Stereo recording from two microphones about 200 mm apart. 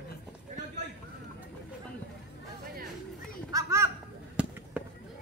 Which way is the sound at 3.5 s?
15° right (ahead or behind).